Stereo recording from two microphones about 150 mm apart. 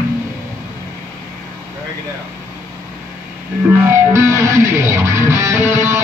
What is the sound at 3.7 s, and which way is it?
Music, 15° right (ahead or behind).